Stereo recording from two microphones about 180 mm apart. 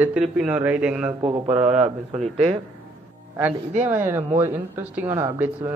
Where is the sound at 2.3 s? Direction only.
35° right (ahead or behind).